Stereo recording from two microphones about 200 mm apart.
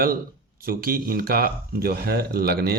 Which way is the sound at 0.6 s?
50° right (ahead or behind).